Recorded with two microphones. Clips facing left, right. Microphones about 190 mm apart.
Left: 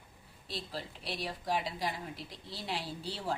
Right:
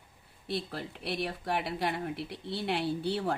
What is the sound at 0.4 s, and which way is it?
Speech, 60° right (ahead or behind).